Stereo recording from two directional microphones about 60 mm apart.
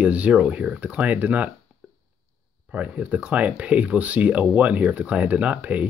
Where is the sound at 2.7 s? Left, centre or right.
Right.